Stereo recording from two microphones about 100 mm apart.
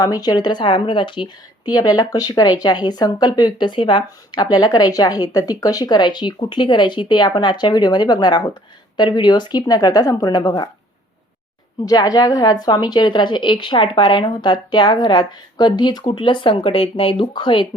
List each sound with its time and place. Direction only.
0.0 s a woman's voice: 40° left (ahead or behind)
11.9 s a woman's voice: 40° left (ahead or behind)